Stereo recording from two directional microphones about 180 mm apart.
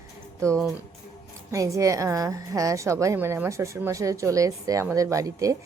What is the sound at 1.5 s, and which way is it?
A woman's voice, 15° right (ahead or behind).